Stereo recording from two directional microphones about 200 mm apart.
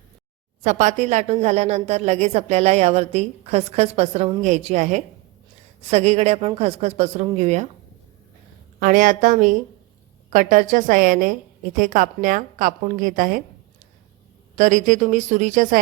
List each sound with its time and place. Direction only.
0.6 s a woman's voice: 35° right (ahead or behind)
8.8 s a woman's voice: 40° right (ahead or behind)
14.5 s a woman's voice: 40° right (ahead or behind)